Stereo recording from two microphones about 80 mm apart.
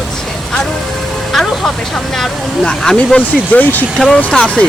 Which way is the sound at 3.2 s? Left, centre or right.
Left.